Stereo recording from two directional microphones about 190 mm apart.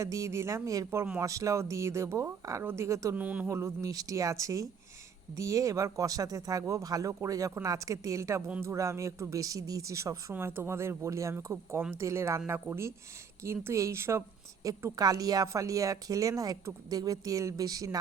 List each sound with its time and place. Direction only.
0.0 s speech: 15° right (ahead or behind)